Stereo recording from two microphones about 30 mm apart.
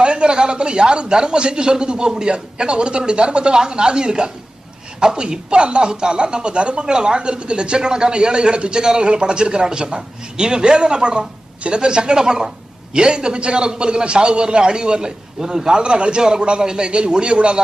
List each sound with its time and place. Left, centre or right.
0.0 s a man's voice: right
6.8 s a man's voice: right
8.8 s a man's voice: right